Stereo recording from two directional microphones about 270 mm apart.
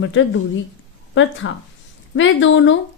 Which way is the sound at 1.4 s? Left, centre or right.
Left.